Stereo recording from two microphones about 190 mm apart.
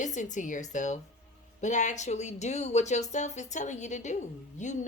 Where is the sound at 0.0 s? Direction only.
40° left (ahead or behind).